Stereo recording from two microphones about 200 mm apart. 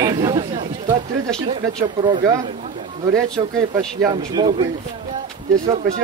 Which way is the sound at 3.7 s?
20° right (ahead or behind).